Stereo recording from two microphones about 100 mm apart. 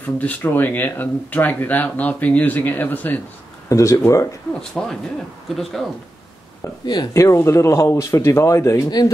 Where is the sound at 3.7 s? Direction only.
30° left (ahead or behind).